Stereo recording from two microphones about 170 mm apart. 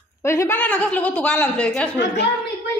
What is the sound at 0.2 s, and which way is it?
A woman's voice, 15° left (ahead or behind).